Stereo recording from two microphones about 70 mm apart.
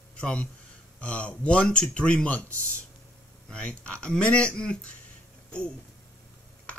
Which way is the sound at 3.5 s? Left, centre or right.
Centre.